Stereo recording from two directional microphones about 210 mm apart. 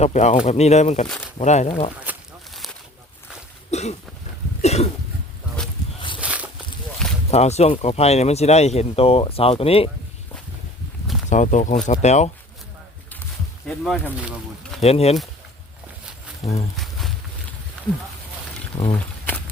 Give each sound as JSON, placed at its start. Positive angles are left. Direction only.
{"t": 0.0, "sound": "speech", "side_deg": 35}
{"t": 2.0, "sound": "a sound", "side_deg": 0}
{"t": 3.7, "sound": "throat clearing", "side_deg": 30}
{"t": 4.6, "sound": "cough", "side_deg": 30}
{"t": 6.1, "sound": "a sound", "side_deg": -5}
{"t": 7.3, "sound": "speech", "side_deg": 30}
{"t": 11.3, "sound": "speech", "side_deg": 35}
{"t": 13.7, "sound": "speech", "side_deg": 0}
{"t": 14.8, "sound": "speech", "side_deg": 30}
{"t": 16.4, "sound": "speech", "side_deg": 30}
{"t": 18.7, "sound": "speech", "side_deg": 20}